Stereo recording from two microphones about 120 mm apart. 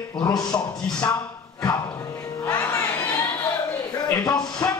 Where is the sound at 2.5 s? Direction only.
20° left (ahead or behind).